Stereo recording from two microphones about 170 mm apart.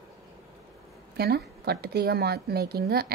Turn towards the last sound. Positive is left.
turn(degrees=-65)  # may be behind; listen again after turning